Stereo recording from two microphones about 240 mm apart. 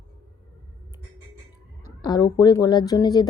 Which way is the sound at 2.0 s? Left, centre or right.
Centre.